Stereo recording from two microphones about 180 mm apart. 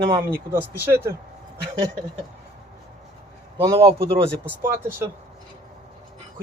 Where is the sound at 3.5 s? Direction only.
20° right (ahead or behind).